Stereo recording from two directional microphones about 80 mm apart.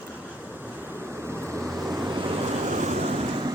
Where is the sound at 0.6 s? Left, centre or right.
Right.